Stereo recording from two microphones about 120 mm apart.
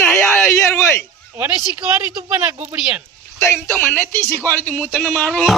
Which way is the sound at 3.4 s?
20° left (ahead or behind).